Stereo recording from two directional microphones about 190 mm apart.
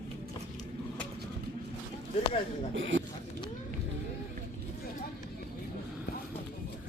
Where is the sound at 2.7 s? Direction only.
85° right.